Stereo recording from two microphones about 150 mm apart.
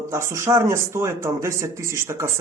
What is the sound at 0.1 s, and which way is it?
Speech, 20° right (ahead or behind).